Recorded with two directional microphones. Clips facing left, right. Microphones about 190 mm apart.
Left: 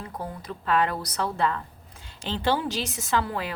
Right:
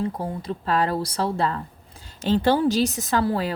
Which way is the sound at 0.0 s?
30° right (ahead or behind).